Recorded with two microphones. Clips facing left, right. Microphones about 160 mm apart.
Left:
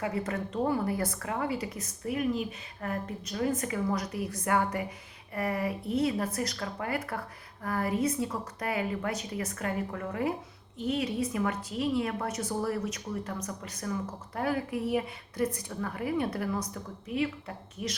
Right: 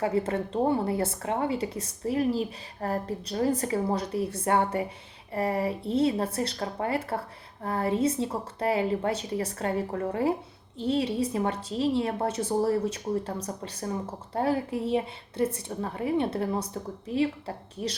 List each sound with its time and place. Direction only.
0.0 s a woman's voice: 30° right (ahead or behind)